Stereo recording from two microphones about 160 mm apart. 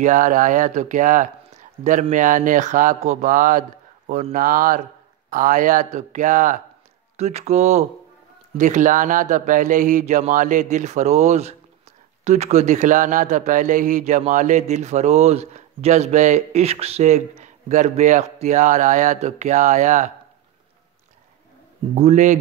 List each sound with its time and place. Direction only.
0.0 s a man's voice: 50° right (ahead or behind)
21.9 s a man's voice: 45° right (ahead or behind)